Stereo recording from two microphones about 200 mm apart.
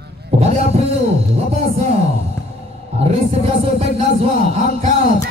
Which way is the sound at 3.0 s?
30° right (ahead or behind).